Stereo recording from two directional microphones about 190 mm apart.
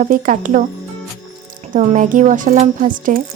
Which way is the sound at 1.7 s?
40° right (ahead or behind).